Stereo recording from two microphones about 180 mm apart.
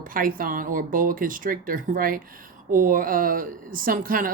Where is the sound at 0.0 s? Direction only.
50° right (ahead or behind).